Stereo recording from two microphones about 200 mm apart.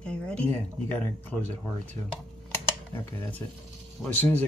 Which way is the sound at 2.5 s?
10° left (ahead or behind).